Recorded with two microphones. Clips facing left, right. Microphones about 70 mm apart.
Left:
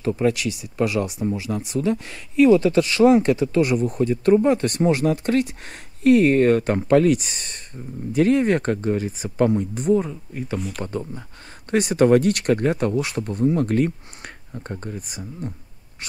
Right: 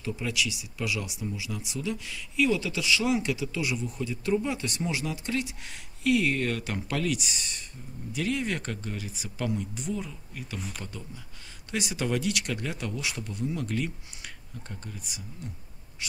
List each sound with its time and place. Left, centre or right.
0.0 s speech: left